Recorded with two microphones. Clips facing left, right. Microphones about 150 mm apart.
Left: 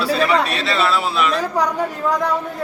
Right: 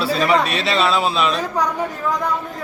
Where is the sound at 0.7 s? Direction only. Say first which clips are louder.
Right 1 dB; 20° right (ahead or behind).